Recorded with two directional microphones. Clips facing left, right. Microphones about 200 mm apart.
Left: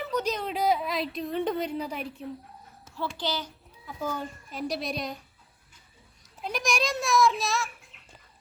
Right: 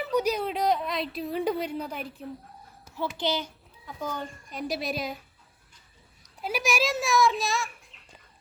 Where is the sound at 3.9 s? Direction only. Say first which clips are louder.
Left 1 dB; 10° left (ahead or behind).